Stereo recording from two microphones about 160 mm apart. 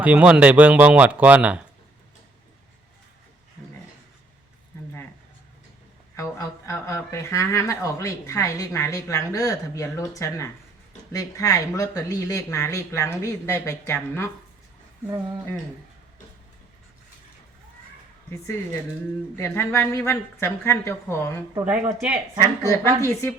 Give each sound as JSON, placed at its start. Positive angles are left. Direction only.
{"t": 0.0, "sound": "speech", "side_deg": -10}
{"t": 6.1, "sound": "speech", "side_deg": 20}
{"t": 19.4, "sound": "a woman's voice", "side_deg": 15}
{"t": 21.7, "sound": "speech", "side_deg": -15}
{"t": 22.4, "sound": "a woman's voice", "side_deg": 15}